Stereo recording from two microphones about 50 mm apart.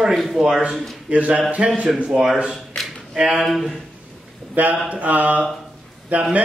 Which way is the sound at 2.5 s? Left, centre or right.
Centre.